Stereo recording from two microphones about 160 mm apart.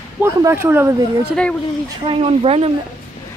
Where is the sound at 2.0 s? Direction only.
35° right (ahead or behind).